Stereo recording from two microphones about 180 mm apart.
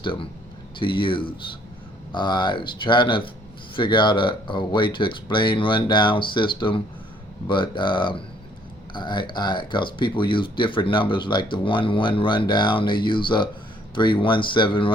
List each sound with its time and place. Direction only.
0.0 s speech: 30° left (ahead or behind)